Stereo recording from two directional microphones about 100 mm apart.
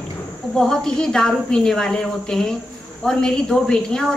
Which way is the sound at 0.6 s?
5° left (ahead or behind).